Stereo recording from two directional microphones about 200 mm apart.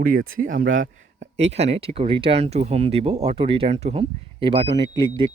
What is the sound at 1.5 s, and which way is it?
Speech, 30° right (ahead or behind).